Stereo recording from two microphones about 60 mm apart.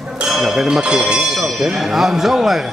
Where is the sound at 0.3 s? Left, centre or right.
Centre.